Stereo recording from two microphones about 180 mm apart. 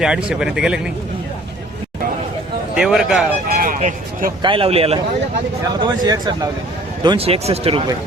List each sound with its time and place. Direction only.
0.0 s speech: 5° right (ahead or behind)
2.7 s speech: 5° right (ahead or behind)
3.5 s a sound: 50° right (ahead or behind)
4.4 s speech: 30° right (ahead or behind)
5.6 s speech: 20° right (ahead or behind)